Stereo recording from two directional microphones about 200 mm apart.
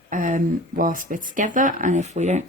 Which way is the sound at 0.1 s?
40° right (ahead or behind).